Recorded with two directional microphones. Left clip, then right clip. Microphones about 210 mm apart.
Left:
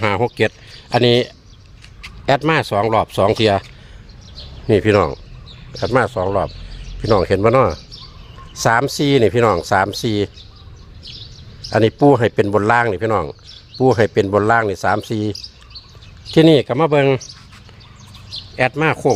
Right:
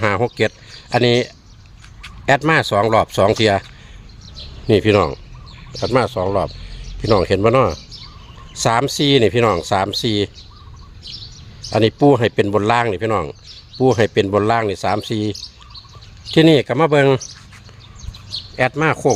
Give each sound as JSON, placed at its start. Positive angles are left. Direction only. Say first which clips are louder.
{"t": 0.0, "sound": "a sound", "louder": "even", "side_deg": -5}
{"t": 0.3, "sound": "speech", "louder": "left 1 dB", "side_deg": 5}
{"t": 11.7, "sound": "speech", "louder": "left 1 dB", "side_deg": 0}
{"t": 18.5, "sound": "speech", "louder": "even", "side_deg": -5}